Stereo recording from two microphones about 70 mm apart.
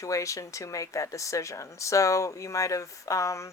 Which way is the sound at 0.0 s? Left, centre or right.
Left.